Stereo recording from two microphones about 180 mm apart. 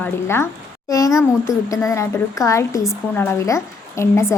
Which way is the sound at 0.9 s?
20° left (ahead or behind).